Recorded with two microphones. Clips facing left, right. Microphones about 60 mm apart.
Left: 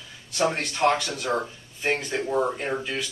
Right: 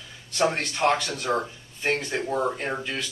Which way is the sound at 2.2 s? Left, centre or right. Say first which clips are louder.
Left 1 dB; centre.